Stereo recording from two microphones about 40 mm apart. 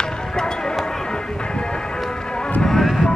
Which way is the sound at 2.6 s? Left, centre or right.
Centre.